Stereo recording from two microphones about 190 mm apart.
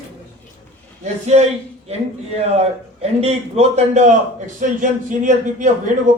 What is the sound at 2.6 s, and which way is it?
A man's voice, 35° right (ahead or behind).